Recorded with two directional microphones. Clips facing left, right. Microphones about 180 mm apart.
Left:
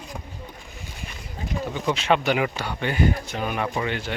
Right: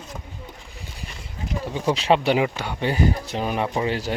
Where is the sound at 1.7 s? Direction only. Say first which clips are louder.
Right 3 dB; 35° right (ahead or behind).